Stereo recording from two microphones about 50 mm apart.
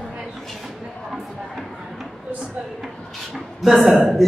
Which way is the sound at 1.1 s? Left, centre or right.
Centre.